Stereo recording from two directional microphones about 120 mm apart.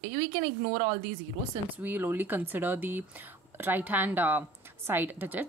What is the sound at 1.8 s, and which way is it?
Speech, 15° right (ahead or behind).